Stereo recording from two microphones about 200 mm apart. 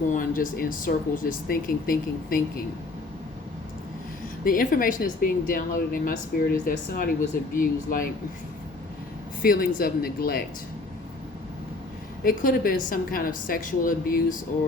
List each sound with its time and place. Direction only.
0.1 s speech: 45° left (ahead or behind)
4.4 s speech: 45° left (ahead or behind)
9.4 s speech: 45° left (ahead or behind)
12.2 s speech: 45° left (ahead or behind)